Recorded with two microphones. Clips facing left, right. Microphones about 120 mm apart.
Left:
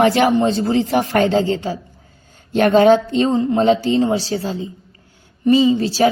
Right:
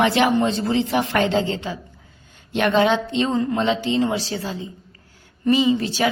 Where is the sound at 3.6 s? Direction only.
40° left (ahead or behind).